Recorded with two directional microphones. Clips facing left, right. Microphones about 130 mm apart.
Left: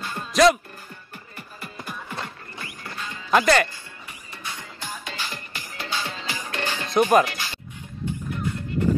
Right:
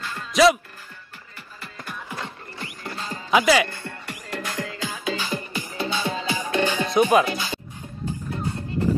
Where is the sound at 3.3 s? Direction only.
5° right (ahead or behind).